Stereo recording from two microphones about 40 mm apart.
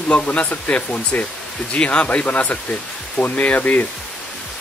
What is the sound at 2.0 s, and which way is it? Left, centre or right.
Speech, left.